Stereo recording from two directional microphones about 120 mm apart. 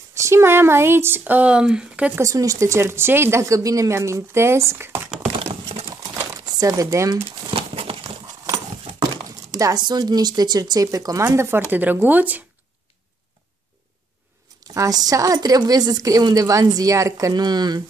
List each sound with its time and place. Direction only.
0.1 s speech: 25° right (ahead or behind)
2.1 s speech: 30° right (ahead or behind)
6.1 s a sound: 30° right (ahead or behind)
7.5 s horse: 50° right (ahead or behind)
9.2 s speech: 30° right (ahead or behind); by 12.4 s 15° right (ahead or behind)
14.7 s speech: 30° right (ahead or behind)